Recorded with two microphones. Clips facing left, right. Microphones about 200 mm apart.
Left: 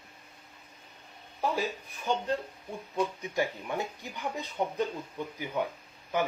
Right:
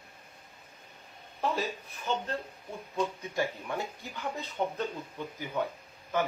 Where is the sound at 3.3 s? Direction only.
15° left (ahead or behind).